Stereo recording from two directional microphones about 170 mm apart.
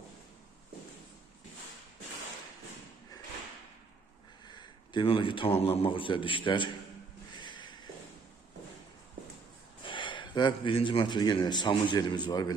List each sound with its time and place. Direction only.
4.4 s speech: 25° left (ahead or behind)
7.3 s a sound: 25° left (ahead or behind)
9.8 s speech: 30° left (ahead or behind)